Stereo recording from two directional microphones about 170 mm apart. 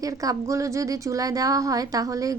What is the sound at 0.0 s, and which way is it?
Speech, 20° right (ahead or behind).